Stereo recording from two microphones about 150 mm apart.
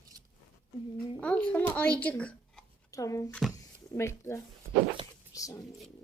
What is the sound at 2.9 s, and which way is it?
Speech, 20° left (ahead or behind).